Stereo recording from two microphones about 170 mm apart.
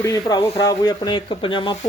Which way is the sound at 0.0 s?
20° left (ahead or behind).